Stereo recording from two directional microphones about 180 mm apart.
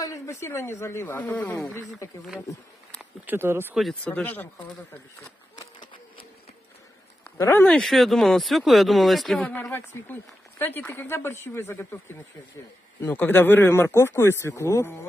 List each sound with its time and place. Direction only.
0.0 s speech: 15° left (ahead or behind)
3.0 s speech: 10° right (ahead or behind)
3.7 s speech: centre (ahead or behind)
5.6 s a sound: 25° left (ahead or behind)
7.2 s speech: 15° left (ahead or behind)
13.0 s speech: 10° left (ahead or behind)